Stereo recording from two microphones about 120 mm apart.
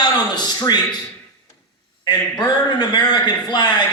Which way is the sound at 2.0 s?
35° left (ahead or behind).